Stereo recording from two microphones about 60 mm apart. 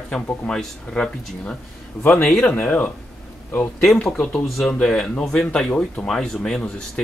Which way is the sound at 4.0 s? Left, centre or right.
Centre.